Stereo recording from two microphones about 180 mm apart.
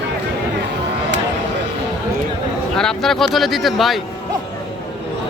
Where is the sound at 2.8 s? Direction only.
5° left (ahead or behind).